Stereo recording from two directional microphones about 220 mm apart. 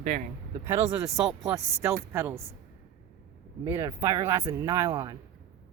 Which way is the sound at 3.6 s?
15° right (ahead or behind).